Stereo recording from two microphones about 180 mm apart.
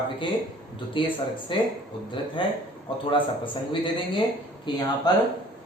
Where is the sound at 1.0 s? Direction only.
30° left (ahead or behind).